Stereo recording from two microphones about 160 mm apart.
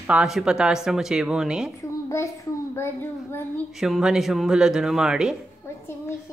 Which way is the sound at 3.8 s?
5° right (ahead or behind).